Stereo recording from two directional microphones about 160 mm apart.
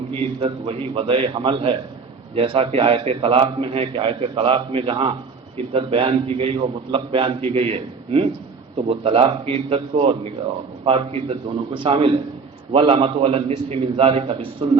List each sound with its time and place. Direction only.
0.3 s a man's voice: 35° right (ahead or behind)